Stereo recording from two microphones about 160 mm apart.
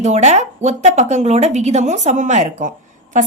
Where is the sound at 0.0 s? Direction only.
45° right (ahead or behind).